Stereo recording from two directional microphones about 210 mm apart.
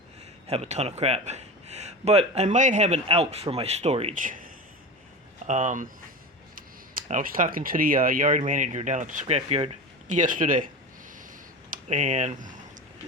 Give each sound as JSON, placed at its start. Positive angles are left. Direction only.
{"t": 0.4, "sound": "a man's voice", "side_deg": -30}
{"t": 5.5, "sound": "a man's voice", "side_deg": -35}
{"t": 10.1, "sound": "a man's voice", "side_deg": -40}
{"t": 11.7, "sound": "speech", "side_deg": -35}